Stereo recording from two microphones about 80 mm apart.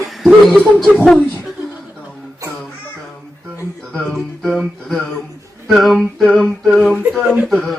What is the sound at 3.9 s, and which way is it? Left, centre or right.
Speech, centre.